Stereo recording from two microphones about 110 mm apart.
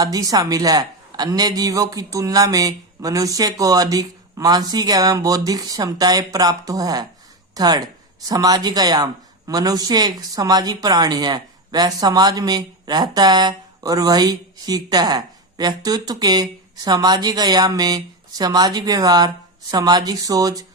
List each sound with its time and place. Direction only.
0.0 s speech: 35° right (ahead or behind)